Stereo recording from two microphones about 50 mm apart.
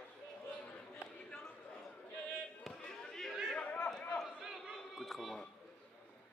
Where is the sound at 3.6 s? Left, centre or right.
Left.